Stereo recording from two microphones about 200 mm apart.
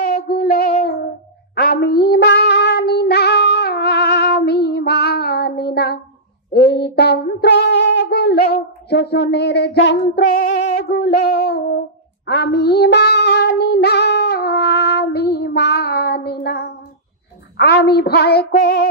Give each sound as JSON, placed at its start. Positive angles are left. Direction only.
{"t": 0.0, "sound": "child singing", "side_deg": 50}
{"t": 6.5, "sound": "a sound", "side_deg": 55}
{"t": 10.8, "sound": "child singing", "side_deg": 55}